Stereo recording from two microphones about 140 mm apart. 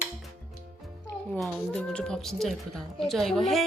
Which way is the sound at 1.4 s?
5° left (ahead or behind).